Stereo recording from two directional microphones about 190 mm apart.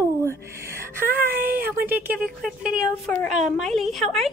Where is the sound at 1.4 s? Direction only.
50° right (ahead or behind).